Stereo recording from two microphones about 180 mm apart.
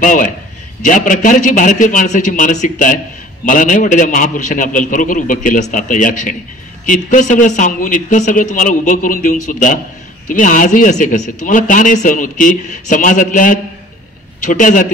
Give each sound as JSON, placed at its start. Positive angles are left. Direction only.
{"t": 0.0, "sound": "a man's voice", "side_deg": 50}